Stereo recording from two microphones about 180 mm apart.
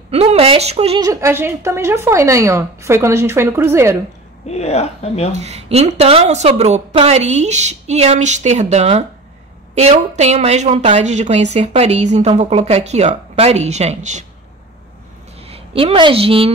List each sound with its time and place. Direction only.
0.1 s speech: 35° right (ahead or behind)
1.0 s speech: 15° right (ahead or behind)
4.5 s speech: 35° left (ahead or behind)
5.3 s speech: 40° right (ahead or behind)
15.4 s a woman's voice: 30° right (ahead or behind)